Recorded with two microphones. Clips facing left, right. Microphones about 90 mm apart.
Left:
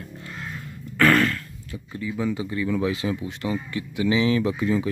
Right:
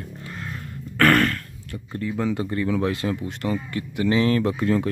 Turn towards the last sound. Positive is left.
turn(degrees=-60)  # may be behind; listen again after turning